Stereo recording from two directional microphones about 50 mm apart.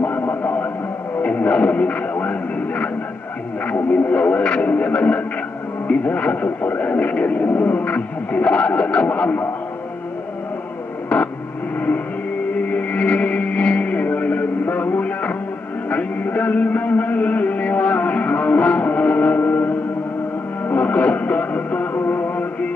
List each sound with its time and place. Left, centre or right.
0.0 s a sound: left
1.2 s music: left
3.6 s speech: left
11.1 s a sound: centre
12.6 s music: left
20.7 s music: left